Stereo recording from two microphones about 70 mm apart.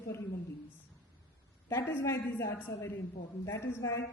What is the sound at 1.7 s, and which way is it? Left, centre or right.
A woman's voice, left.